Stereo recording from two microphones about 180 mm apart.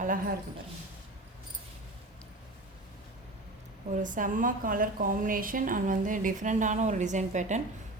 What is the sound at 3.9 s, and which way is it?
A woman's voice, 45° right (ahead or behind).